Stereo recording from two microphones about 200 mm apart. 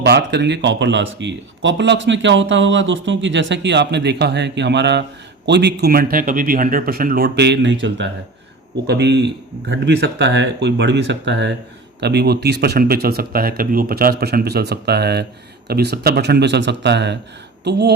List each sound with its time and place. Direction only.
0.0 s speech: 60° right (ahead or behind)